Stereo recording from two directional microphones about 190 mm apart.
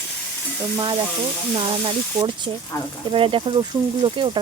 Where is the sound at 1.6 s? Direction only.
25° right (ahead or behind).